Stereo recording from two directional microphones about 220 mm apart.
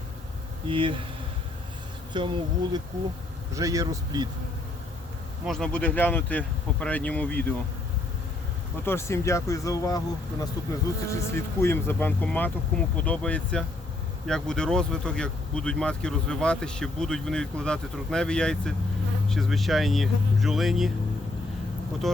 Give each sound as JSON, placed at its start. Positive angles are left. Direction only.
{"t": 0.7, "sound": "speech", "side_deg": -25}
{"t": 2.1, "sound": "speech", "side_deg": -20}
{"t": 5.5, "sound": "speech", "side_deg": 0}
{"t": 8.8, "sound": "speech", "side_deg": 10}
{"t": 11.1, "sound": "speech", "side_deg": 10}
{"t": 22.0, "sound": "speech", "side_deg": 0}